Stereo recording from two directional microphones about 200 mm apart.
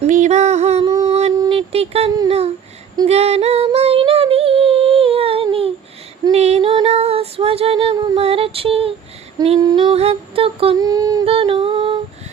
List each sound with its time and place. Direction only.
0.0 s music: 35° right (ahead or behind)
0.9 s music: 20° right (ahead or behind)
1.4 s a sound: 25° right (ahead or behind)
2.1 s speech: 25° right (ahead or behind)
3.1 s female singing: 30° right (ahead or behind)